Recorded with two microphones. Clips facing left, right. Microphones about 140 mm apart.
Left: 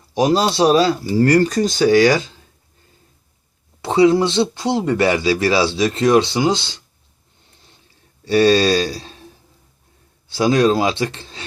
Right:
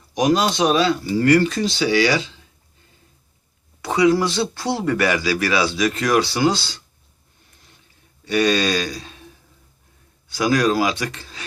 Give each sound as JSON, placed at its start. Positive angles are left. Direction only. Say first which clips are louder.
{"t": 0.1, "sound": "speech", "louder": "left 2 dB", "side_deg": 30}
{"t": 3.8, "sound": "speech", "louder": "left 3 dB", "side_deg": 30}
{"t": 8.2, "sound": "a sound", "louder": "left 5 dB", "side_deg": 30}
{"t": 10.2, "sound": "speech", "louder": "left 4 dB", "side_deg": 30}